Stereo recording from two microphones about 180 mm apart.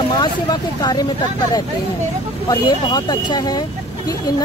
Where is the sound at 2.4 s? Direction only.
25° left (ahead or behind).